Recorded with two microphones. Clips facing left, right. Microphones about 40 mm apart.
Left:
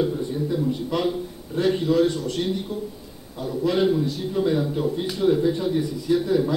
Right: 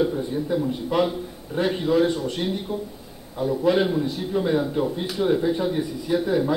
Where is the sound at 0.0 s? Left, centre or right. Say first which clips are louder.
Right 1 dB; centre.